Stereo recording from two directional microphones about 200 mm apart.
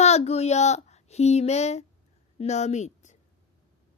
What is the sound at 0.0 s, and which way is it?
A woman's voice, 35° left (ahead or behind).